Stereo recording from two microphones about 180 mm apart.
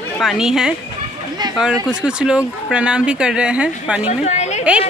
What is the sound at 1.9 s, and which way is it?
Speech, 5° right (ahead or behind).